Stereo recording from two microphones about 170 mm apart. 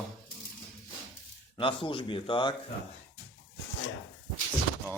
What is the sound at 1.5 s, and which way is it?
A man's voice, 30° left (ahead or behind).